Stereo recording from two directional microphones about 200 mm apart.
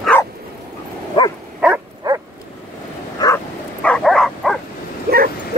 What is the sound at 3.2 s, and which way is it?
Bow-wow, 20° left (ahead or behind).